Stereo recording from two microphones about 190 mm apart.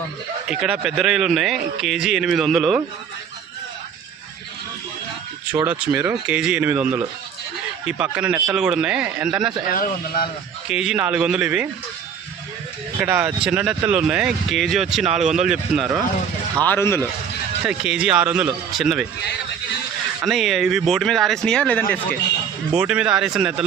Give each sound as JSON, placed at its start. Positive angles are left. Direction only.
{"t": 0.4, "sound": "speech", "side_deg": -5}
{"t": 5.6, "sound": "speech", "side_deg": -5}
{"t": 9.7, "sound": "a man's voice", "side_deg": 50}
{"t": 10.7, "sound": "speech", "side_deg": -5}
{"t": 13.0, "sound": "speech", "side_deg": -10}
{"t": 15.0, "sound": "speech", "side_deg": -40}
{"t": 15.4, "sound": "speech", "side_deg": -5}
{"t": 16.6, "sound": "speech", "side_deg": 10}
{"t": 17.6, "sound": "speech", "side_deg": -5}
{"t": 20.2, "sound": "speech", "side_deg": 0}
{"t": 22.7, "sound": "speech", "side_deg": -5}